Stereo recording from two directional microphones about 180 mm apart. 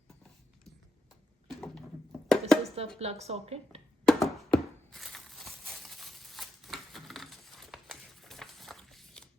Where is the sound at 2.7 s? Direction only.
35° right (ahead or behind).